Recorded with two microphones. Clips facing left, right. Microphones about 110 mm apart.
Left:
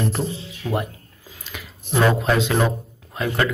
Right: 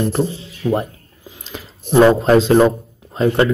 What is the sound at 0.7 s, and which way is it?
Speech, 20° right (ahead or behind).